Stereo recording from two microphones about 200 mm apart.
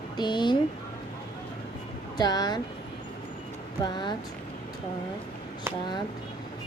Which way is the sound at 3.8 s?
20° left (ahead or behind).